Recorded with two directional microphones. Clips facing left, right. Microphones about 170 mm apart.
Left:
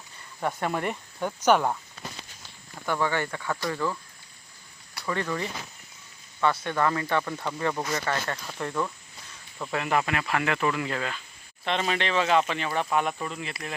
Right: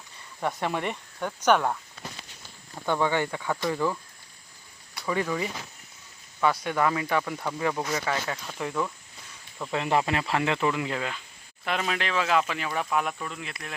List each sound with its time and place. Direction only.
0.3 s speech: centre (ahead or behind)
2.8 s speech: 15° right (ahead or behind)
5.0 s speech: 10° right (ahead or behind)
6.7 s speech: 10° right (ahead or behind)
9.7 s speech: 25° right (ahead or behind)
11.6 s speech: 5° right (ahead or behind)